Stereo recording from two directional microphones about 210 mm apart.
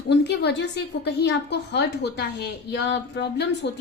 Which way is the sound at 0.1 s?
55° left (ahead or behind).